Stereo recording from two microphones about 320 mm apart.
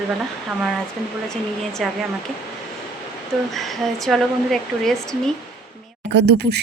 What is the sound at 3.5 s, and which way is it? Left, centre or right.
Speech, centre.